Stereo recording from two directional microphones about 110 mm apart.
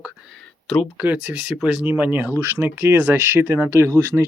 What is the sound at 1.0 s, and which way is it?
Speech, 10° right (ahead or behind).